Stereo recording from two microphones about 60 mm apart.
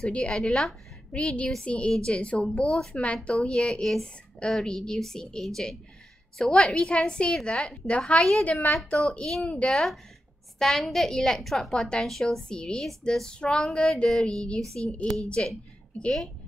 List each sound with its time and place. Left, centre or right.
0.0 s a woman's voice: centre
1.1 s a woman's voice: centre
3.8 s a woman's voice: centre
8.2 s a woman's voice: centre